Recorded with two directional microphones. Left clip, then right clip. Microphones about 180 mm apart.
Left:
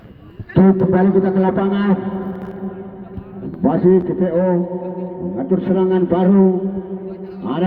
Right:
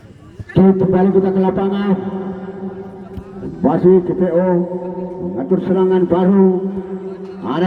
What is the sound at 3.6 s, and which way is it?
A man's voice, 10° left (ahead or behind).